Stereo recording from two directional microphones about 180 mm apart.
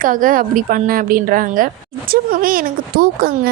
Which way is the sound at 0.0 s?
50° right (ahead or behind).